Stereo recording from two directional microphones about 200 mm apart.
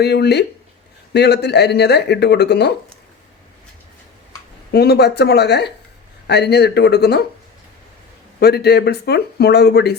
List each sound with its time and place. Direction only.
0.0 s speech: 55° left (ahead or behind)
4.7 s speech: 55° left (ahead or behind)
8.4 s speech: 55° left (ahead or behind)